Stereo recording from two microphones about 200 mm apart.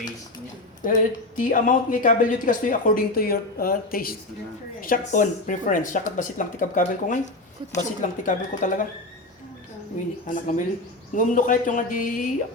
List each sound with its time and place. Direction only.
0.8 s speech: 40° left (ahead or behind)
10.2 s speech: 40° left (ahead or behind)